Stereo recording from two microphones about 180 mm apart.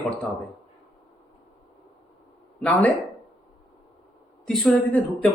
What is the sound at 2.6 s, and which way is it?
Speech, 10° left (ahead or behind).